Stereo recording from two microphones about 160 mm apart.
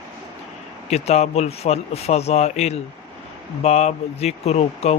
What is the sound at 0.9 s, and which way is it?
Speech, 45° left (ahead or behind).